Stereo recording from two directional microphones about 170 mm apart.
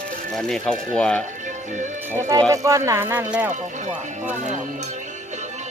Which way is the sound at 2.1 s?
15° right (ahead or behind).